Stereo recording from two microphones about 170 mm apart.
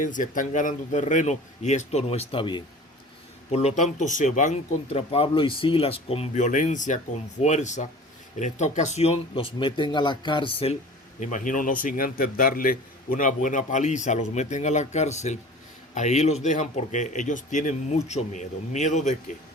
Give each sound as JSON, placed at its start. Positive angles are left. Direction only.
{"t": 0.0, "sound": "speech", "side_deg": 50}
{"t": 3.5, "sound": "speech", "side_deg": 40}
{"t": 11.2, "sound": "speech", "side_deg": 50}